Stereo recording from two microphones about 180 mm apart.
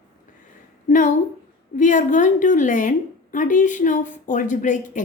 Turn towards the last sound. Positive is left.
turn(degrees=45)  # may be behind; listen again after turning